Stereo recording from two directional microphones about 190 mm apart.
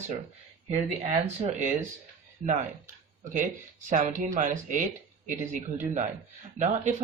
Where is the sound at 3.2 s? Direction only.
45° right (ahead or behind).